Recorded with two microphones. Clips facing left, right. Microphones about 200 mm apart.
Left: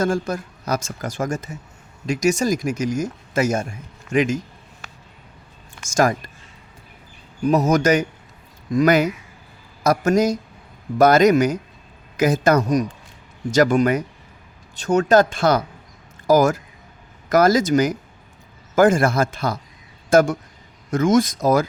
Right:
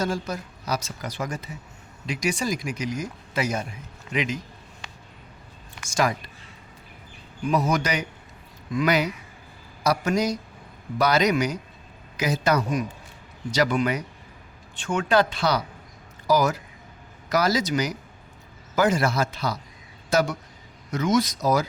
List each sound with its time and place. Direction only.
0.0 s speech: 50° left (ahead or behind)
5.9 s speech: 45° left (ahead or behind)
7.4 s speech: 40° left (ahead or behind)